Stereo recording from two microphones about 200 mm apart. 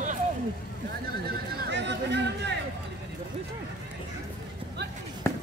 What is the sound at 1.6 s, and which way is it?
Speech, 60° right (ahead or behind).